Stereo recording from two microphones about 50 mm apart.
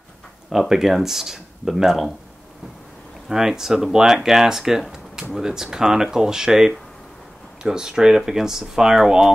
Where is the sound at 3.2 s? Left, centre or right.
Centre.